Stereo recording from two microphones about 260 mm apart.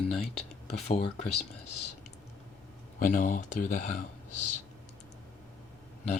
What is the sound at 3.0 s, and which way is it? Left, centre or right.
Speech, left.